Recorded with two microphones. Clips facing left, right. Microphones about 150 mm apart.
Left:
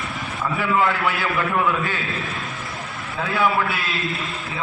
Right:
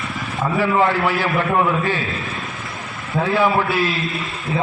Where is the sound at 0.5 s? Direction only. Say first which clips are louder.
Right 4 dB; 30° right (ahead or behind).